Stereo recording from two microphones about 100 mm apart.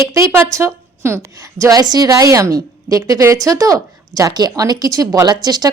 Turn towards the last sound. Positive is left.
turn(degrees=-40)  # may be behind; listen again after turning